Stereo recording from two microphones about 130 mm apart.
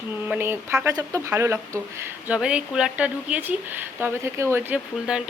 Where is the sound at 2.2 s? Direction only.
10° right (ahead or behind).